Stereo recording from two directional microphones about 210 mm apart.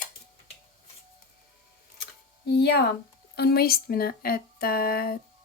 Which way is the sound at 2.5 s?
55° left (ahead or behind).